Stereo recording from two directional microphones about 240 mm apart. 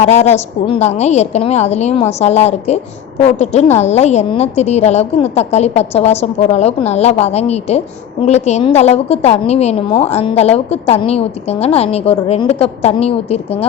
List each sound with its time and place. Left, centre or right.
0.0 s a woman's voice: left